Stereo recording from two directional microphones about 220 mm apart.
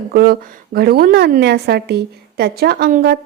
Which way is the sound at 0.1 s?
45° right (ahead or behind).